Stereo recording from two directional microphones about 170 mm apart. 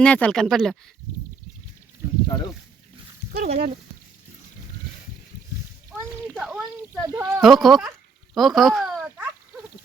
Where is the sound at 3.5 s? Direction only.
40° right (ahead or behind).